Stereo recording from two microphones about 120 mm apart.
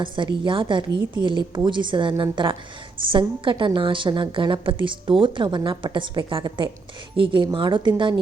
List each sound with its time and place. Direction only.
0.0 s a woman's voice: 40° right (ahead or behind)